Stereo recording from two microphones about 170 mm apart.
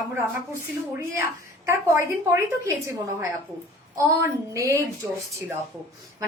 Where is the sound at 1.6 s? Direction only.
15° right (ahead or behind).